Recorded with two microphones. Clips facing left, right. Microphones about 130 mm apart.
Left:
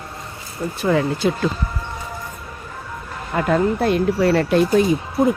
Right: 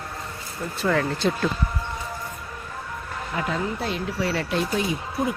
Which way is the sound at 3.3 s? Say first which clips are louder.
Left 9 dB; 55° left (ahead or behind).